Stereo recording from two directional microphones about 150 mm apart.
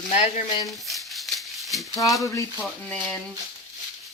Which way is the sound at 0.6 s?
Centre (ahead or behind).